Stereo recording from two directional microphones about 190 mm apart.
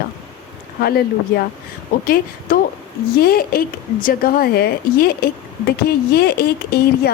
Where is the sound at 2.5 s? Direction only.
45° left (ahead or behind).